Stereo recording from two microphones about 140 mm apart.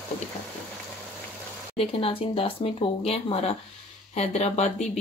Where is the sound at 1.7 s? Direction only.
45° left (ahead or behind).